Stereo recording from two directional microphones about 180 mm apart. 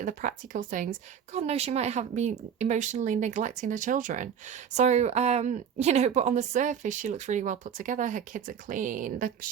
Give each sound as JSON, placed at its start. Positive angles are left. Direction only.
{"t": 0.0, "sound": "speech", "side_deg": -45}